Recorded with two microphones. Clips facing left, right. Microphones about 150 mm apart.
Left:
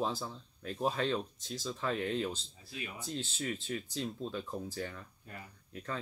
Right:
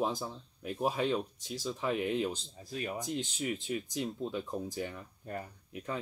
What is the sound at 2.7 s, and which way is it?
Speech, 45° right (ahead or behind).